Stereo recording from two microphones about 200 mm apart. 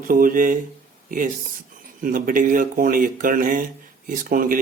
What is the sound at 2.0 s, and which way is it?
Speech, 45° right (ahead or behind).